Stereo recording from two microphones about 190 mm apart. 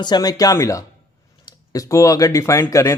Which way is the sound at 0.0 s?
20° left (ahead or behind).